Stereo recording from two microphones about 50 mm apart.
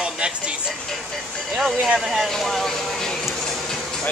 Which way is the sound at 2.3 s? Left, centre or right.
Centre.